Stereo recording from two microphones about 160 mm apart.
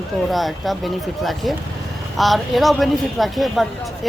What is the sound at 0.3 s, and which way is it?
Speech, centre (ahead or behind).